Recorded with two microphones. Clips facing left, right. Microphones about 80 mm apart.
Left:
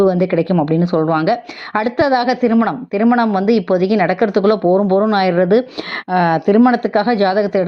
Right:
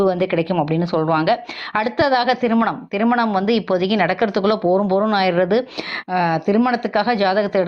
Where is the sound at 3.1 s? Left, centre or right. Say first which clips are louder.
Left 4 dB; left.